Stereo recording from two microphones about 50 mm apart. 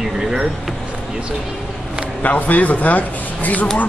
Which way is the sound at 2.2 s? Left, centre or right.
Left.